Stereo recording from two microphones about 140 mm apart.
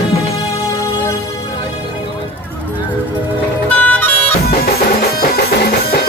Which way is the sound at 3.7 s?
10° left (ahead or behind).